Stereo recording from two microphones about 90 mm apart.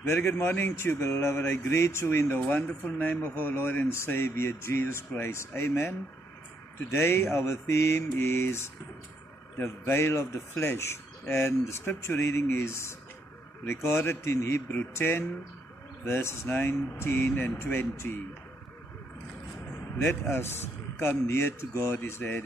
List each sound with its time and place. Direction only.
0.0 s speech: 25° left (ahead or behind)
20.0 s speech: 25° left (ahead or behind)